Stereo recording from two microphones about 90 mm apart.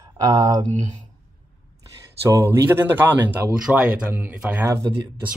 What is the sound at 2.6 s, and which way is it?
Speech, 20° right (ahead or behind).